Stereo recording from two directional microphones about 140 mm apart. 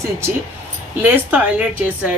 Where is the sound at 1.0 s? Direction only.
10° right (ahead or behind).